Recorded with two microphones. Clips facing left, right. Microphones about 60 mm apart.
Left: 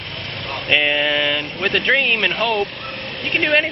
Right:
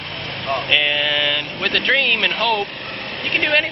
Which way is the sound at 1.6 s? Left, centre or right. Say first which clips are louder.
Left 1 dB; centre.